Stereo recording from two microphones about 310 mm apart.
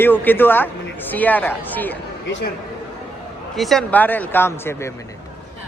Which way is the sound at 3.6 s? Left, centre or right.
Centre.